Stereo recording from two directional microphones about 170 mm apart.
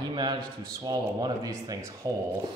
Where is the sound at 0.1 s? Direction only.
25° right (ahead or behind).